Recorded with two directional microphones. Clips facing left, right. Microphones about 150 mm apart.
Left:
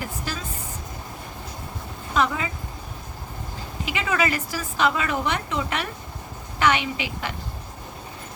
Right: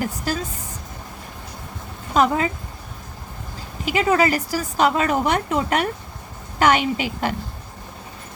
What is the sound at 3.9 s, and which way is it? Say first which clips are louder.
A woman's voice: right 6 dB; 35° right (ahead or behind).